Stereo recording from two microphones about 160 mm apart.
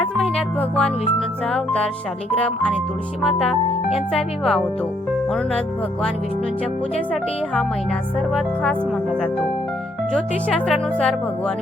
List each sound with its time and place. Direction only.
0.0 s music: 5° left (ahead or behind)
1.5 s speech: 5° left (ahead or behind)
8.3 s speech: centre (ahead or behind)
10.1 s speech: 5° left (ahead or behind)